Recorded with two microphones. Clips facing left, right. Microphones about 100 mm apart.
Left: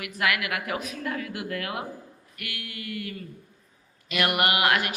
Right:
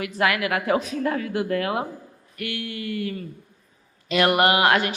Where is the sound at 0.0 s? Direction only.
30° right (ahead or behind).